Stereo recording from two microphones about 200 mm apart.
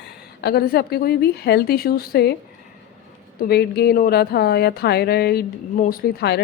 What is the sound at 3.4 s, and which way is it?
Speech, 55° left (ahead or behind).